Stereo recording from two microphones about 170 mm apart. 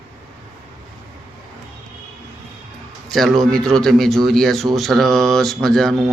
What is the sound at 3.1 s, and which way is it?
Speech, centre (ahead or behind).